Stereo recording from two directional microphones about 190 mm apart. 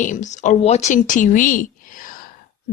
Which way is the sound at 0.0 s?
40° left (ahead or behind).